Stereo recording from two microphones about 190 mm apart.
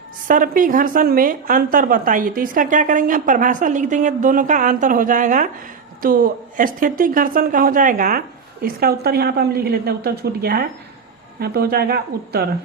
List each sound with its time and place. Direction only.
0.3 s a woman's voice: 45° right (ahead or behind)